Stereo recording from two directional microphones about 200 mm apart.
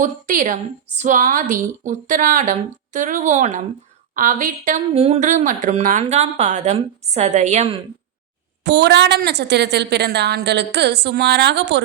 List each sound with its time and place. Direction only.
0.0 s a woman's voice: 40° right (ahead or behind)
8.6 s a woman's voice: 60° right (ahead or behind)